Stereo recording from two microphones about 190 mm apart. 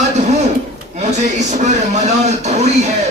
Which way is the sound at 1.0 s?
40° right (ahead or behind).